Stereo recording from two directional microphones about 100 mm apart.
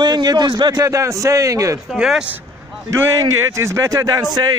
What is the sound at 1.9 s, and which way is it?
Speech, 5° right (ahead or behind).